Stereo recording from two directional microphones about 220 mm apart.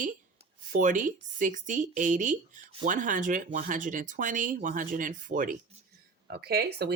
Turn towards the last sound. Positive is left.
turn(degrees=-45)  # may be behind; listen again after turning